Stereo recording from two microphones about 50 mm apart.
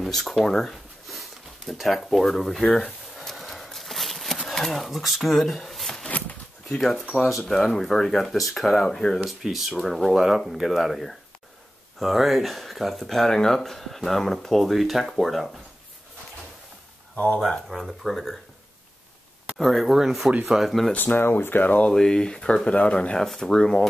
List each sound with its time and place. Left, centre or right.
0.0 s speech: centre
3.2 s horse: centre
4.5 s speech: centre
6.0 s a sound: left
6.7 s speech: centre
9.4 s speech: centre
17.6 s speech: centre
19.5 s speech: centre
20.9 s speech: left
21.9 s speech: centre
23.1 s speech: centre